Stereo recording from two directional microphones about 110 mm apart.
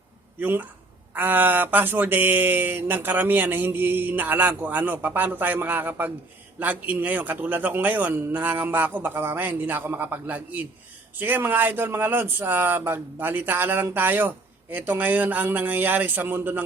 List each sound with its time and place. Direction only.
0.3 s speech: 15° right (ahead or behind)